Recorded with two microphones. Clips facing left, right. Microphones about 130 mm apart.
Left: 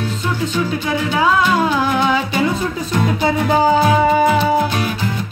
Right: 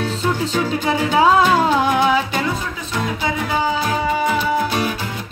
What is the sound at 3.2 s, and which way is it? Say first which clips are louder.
Music: left 7 dB; 35° left (ahead or behind).